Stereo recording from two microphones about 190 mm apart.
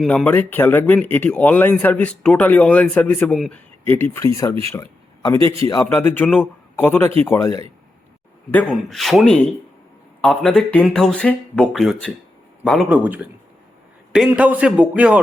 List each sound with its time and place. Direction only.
0.0 s speech: centre (ahead or behind)
4.7 s a sound: 15° left (ahead or behind)
5.4 s a man's voice: 30° right (ahead or behind)
5.6 s a man's voice: 15° left (ahead or behind); by 15.2 s 5° right (ahead or behind)